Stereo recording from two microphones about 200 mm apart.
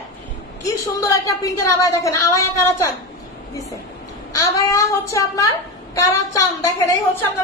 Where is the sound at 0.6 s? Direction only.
15° left (ahead or behind).